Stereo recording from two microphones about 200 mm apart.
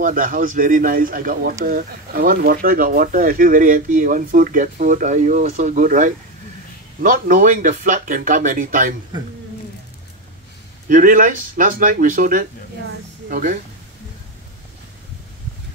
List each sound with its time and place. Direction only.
0.0 s speech: 40° right (ahead or behind)
10.9 s speech: 40° right (ahead or behind)